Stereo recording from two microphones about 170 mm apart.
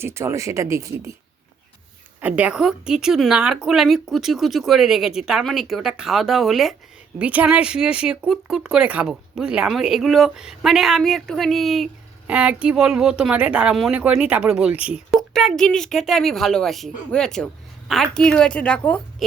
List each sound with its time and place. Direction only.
0.0 s speech: 15° right (ahead or behind)
2.2 s speech: 10° right (ahead or behind); by 18.9 s 10° left (ahead or behind)